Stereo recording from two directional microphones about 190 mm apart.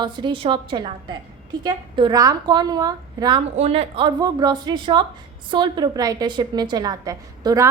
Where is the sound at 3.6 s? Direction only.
30° right (ahead or behind).